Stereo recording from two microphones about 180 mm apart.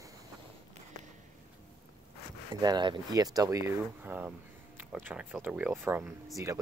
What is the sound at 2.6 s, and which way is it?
Speech, 25° right (ahead or behind).